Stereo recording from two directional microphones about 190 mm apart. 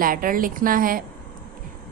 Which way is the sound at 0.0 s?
50° right (ahead or behind).